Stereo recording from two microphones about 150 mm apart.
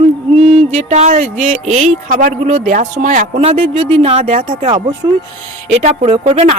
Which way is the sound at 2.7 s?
55° right (ahead or behind).